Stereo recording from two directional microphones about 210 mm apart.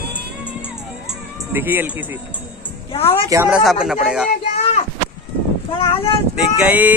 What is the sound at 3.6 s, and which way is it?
Speech, centre (ahead or behind).